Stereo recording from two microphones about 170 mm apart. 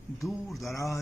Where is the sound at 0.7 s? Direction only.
20° left (ahead or behind).